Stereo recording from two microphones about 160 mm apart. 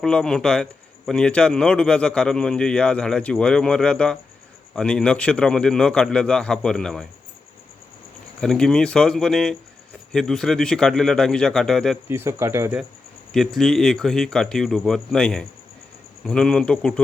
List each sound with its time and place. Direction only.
0.0 s a man's voice: 5° left (ahead or behind)
8.4 s a man's voice: 5° left (ahead or behind)
12.0 s speech: 15° right (ahead or behind)
13.3 s a man's voice: centre (ahead or behind)